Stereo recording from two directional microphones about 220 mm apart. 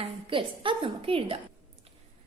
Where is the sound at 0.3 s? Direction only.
25° right (ahead or behind).